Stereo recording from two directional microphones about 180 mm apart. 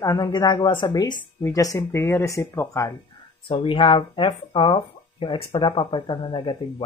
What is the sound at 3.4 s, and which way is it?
Speech, 30° left (ahead or behind).